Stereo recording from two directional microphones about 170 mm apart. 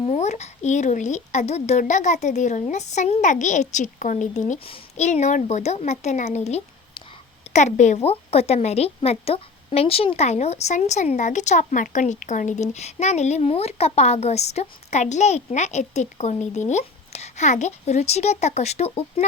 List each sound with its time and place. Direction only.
0.0 s a woman's voice: 40° left (ahead or behind)